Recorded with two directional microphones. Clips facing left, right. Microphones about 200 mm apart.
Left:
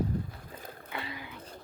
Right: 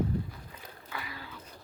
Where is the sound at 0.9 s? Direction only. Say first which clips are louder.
Left 2 dB; 25° left (ahead or behind).